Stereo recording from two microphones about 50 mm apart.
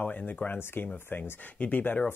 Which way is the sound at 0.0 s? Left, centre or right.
Left.